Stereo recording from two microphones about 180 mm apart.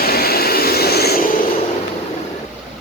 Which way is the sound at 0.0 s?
60° left (ahead or behind).